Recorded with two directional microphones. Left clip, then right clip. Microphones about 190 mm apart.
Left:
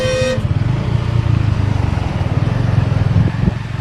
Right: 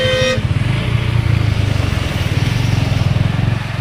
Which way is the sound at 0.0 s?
60° left (ahead or behind).